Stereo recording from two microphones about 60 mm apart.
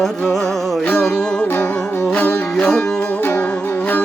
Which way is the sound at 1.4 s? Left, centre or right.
Left.